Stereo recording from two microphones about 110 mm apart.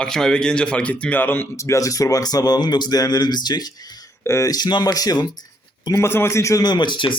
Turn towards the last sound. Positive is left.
turn(degrees=45)  # may be behind; listen again after turning